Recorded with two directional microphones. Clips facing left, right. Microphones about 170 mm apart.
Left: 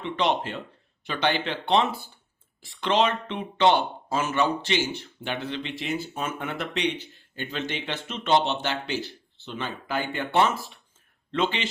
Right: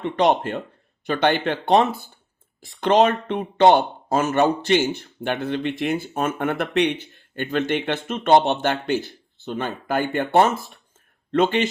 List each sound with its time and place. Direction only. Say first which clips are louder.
0.0 s speech: right 6 dB; 50° right (ahead or behind)